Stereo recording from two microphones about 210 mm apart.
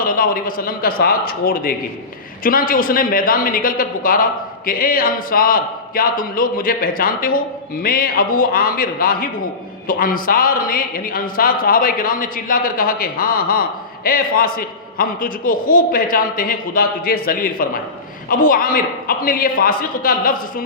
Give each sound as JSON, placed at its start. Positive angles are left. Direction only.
{"t": 0.0, "sound": "a man's voice", "side_deg": 45}